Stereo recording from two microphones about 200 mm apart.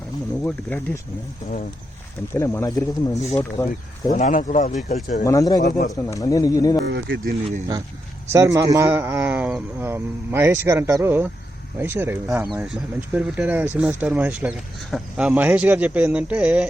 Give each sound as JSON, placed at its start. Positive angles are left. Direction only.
{"t": 0.4, "sound": "speech", "side_deg": 10}
{"t": 2.3, "sound": "speech", "side_deg": 10}
{"t": 4.1, "sound": "speech", "side_deg": 40}
{"t": 5.2, "sound": "speech", "side_deg": 15}
{"t": 5.6, "sound": "speech", "side_deg": 35}
{"t": 5.9, "sound": "speech", "side_deg": 15}
{"t": 6.8, "sound": "speech", "side_deg": -65}
{"t": 8.3, "sound": "speech", "side_deg": -15}